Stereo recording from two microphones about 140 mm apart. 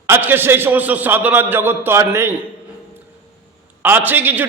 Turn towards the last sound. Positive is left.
turn(degrees=-15)  # may be behind; listen again after turning